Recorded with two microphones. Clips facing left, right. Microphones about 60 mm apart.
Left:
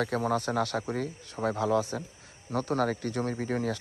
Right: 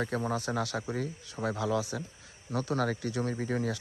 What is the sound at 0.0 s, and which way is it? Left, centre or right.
Speech, left.